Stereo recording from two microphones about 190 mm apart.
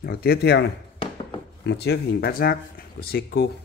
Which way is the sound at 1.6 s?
65° left (ahead or behind).